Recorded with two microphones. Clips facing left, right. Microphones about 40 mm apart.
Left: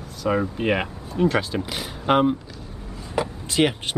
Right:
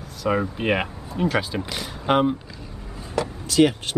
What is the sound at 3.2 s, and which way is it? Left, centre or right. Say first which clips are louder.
Speech: right 3 dB; left.